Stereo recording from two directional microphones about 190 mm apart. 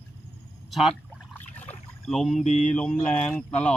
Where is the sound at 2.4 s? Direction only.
40° left (ahead or behind).